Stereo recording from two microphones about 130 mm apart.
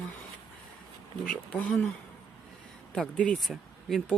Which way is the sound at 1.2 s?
10° left (ahead or behind).